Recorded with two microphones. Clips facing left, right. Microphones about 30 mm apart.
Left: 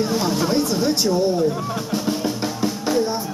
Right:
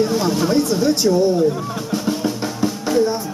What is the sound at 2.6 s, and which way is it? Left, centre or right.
Music, centre.